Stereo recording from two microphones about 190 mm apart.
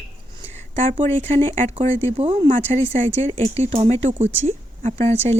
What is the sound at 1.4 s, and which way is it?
Speech, 25° right (ahead or behind).